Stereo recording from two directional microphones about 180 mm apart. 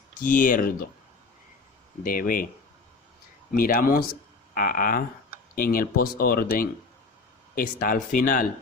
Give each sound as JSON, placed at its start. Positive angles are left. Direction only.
{"t": 0.2, "sound": "speech", "side_deg": 50}
{"t": 2.0, "sound": "speech", "side_deg": 50}
{"t": 3.5, "sound": "speech", "side_deg": 55}